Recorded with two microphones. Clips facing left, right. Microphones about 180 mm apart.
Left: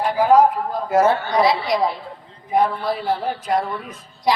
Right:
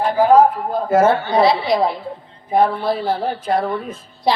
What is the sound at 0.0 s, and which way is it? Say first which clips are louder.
A woman's voice: right 2 dB; 25° right (ahead or behind).